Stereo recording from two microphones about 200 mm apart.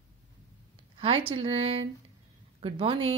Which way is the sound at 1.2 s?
30° right (ahead or behind).